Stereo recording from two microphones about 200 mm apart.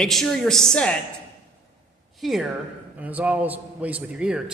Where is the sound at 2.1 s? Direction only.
Centre (ahead or behind).